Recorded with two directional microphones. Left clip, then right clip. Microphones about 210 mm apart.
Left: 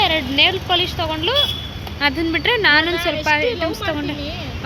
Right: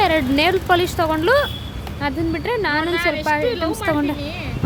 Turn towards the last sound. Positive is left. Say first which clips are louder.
# right 2 dB
turn(degrees=-20)  # may be behind; listen again after turning